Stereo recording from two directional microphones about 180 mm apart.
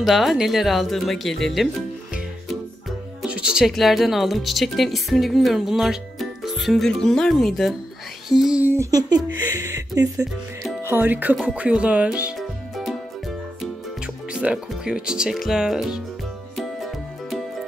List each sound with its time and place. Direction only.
0.0 s speech: centre (ahead or behind)
3.2 s speech: 5° right (ahead or behind)
10.8 s music: 10° right (ahead or behind)